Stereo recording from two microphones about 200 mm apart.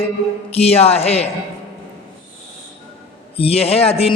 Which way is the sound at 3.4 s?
30° left (ahead or behind).